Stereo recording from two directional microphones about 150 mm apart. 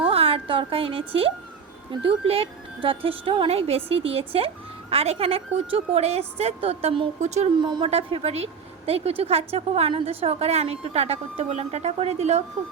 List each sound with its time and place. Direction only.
0.0 s a woman's voice: 40° right (ahead or behind)
7.5 s speech: 30° right (ahead or behind)
7.9 s a woman's voice: 40° right (ahead or behind)